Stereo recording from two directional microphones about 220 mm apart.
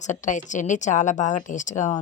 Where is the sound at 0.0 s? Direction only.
35° left (ahead or behind).